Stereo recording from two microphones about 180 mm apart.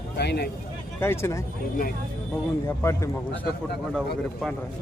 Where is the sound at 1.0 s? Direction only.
15° left (ahead or behind).